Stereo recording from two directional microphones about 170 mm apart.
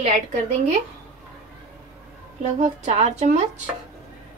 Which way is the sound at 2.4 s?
45° right (ahead or behind).